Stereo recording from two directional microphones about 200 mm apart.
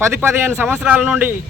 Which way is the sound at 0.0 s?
10° right (ahead or behind).